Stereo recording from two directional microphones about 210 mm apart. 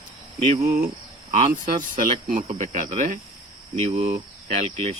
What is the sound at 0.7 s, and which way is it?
Cricket, 40° right (ahead or behind).